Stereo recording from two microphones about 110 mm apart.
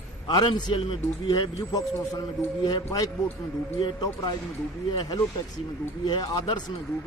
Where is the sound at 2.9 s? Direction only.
35° left (ahead or behind).